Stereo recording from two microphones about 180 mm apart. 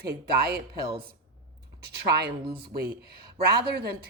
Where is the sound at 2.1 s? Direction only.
65° right (ahead or behind).